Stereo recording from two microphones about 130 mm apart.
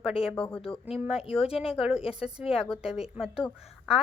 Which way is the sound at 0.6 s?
50° left (ahead or behind).